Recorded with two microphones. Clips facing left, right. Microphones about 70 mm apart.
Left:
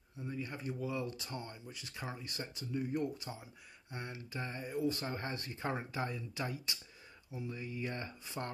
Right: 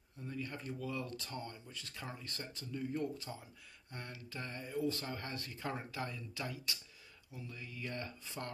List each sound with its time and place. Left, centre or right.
0.2 s speech: centre